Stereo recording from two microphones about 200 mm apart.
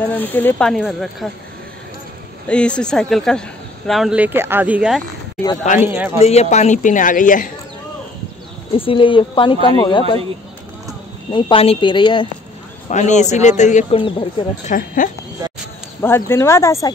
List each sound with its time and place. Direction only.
0.0 s speech: 10° left (ahead or behind)
2.4 s a man's voice: 5° left (ahead or behind); by 6.2 s 10° right (ahead or behind)
6.2 s speech: 35° left (ahead or behind)
8.7 s speech: 25° left (ahead or behind)
11.3 s speech: 25° left (ahead or behind)
12.9 s speech: 35° left (ahead or behind)
16.0 s speech: 10° left (ahead or behind)